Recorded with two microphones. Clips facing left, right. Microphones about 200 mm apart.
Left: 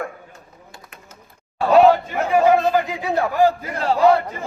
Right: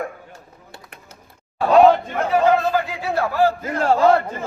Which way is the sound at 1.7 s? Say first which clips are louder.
Even; 10° left (ahead or behind).